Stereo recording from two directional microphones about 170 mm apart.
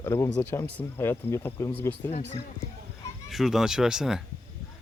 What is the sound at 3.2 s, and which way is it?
Speech, centre (ahead or behind).